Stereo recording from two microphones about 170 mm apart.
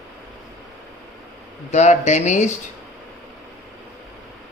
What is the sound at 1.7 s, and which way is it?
Speech, 40° left (ahead or behind).